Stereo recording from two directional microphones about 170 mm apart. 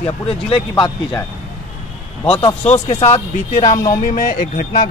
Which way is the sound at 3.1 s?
45° left (ahead or behind).